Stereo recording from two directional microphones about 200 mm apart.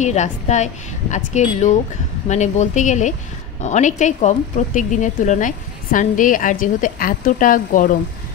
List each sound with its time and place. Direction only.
0.0 s speech: 35° left (ahead or behind)